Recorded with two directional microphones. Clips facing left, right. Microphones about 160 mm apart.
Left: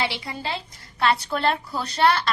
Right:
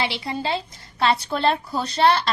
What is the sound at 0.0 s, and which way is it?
A woman's voice, 25° right (ahead or behind).